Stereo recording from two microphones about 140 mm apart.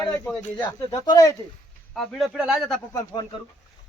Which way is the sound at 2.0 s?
Centre (ahead or behind).